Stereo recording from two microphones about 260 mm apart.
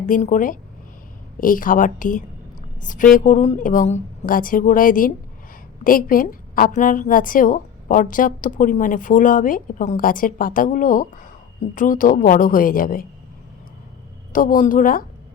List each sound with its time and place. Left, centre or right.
0.0 s a woman's voice: left
14.3 s a woman's voice: left